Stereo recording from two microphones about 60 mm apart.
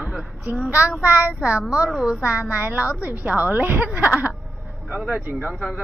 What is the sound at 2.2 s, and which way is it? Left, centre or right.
A woman's voice, right.